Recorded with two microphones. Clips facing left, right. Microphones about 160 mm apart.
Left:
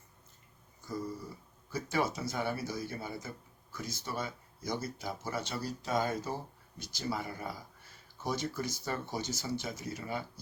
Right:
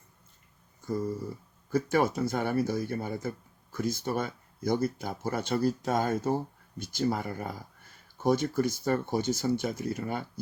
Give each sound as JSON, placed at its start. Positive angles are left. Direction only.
{"t": 1.7, "sound": "speech", "side_deg": -55}